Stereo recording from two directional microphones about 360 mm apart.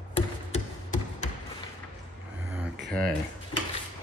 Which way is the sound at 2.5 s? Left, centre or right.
Centre.